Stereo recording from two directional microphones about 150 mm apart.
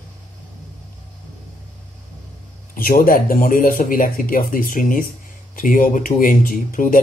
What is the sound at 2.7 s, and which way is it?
Speech, 70° left (ahead or behind).